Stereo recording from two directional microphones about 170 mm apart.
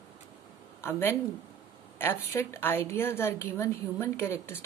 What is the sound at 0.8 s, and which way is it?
A woman's voice, 15° left (ahead or behind).